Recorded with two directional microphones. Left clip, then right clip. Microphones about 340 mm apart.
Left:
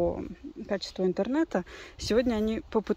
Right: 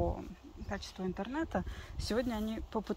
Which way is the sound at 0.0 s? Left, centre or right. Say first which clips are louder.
Left 8 dB; left.